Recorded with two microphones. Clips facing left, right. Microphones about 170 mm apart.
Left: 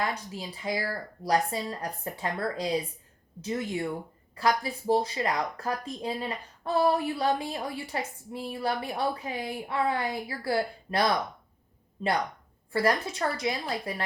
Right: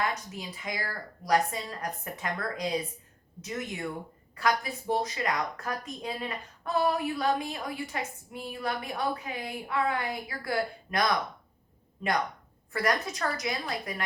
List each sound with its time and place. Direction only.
0.1 s a woman's voice: 30° left (ahead or behind)